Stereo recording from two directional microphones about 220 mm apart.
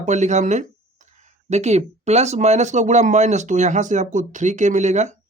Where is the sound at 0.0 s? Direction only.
30° right (ahead or behind).